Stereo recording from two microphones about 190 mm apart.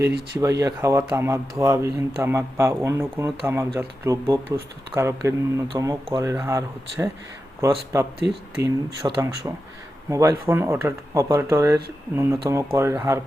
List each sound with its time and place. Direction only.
0.3 s speech: 15° right (ahead or behind)